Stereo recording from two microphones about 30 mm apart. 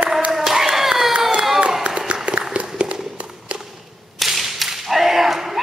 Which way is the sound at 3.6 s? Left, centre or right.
Centre.